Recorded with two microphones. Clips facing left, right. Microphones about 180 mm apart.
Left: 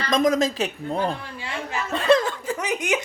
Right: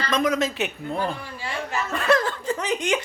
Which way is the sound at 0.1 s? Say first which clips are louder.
Left 4 dB; 35° left (ahead or behind).